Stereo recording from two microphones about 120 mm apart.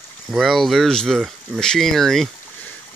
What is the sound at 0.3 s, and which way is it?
Speech, centre (ahead or behind).